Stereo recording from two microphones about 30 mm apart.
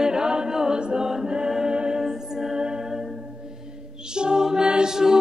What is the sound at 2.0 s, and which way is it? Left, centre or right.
Music, centre.